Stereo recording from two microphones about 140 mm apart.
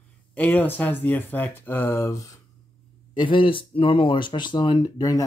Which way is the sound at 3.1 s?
35° left (ahead or behind).